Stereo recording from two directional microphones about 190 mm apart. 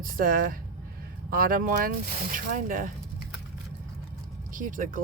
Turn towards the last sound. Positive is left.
turn(degrees=-45)  # may be behind; listen again after turning